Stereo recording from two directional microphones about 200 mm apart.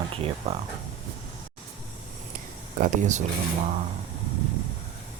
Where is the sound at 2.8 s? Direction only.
40° right (ahead or behind).